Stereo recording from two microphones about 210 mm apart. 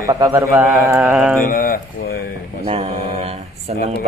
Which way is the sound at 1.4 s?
45° left (ahead or behind).